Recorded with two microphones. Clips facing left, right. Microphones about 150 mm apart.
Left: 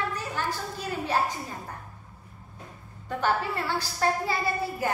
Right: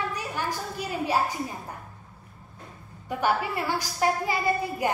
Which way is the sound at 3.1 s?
10° right (ahead or behind).